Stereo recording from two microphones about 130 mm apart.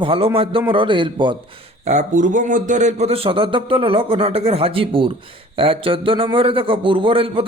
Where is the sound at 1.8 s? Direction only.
65° right (ahead or behind).